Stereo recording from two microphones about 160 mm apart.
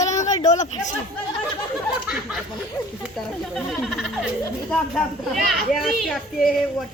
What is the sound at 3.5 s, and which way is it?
A child's voice, centre (ahead or behind).